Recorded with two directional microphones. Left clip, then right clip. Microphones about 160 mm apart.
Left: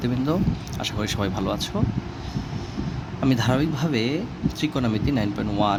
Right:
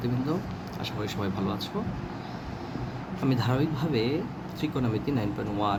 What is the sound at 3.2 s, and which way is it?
Speech, 60° left (ahead or behind).